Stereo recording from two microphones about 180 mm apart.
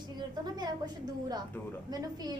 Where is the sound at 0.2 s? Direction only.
25° right (ahead or behind).